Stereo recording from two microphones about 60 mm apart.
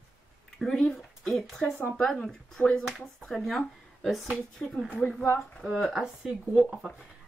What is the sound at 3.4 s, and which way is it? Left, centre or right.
Speech, centre.